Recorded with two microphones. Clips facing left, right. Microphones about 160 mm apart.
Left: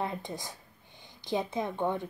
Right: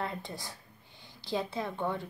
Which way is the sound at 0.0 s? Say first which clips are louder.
Left 2 dB; 20° left (ahead or behind).